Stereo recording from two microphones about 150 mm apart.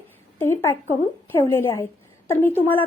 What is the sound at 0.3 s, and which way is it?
Speech, 15° left (ahead or behind).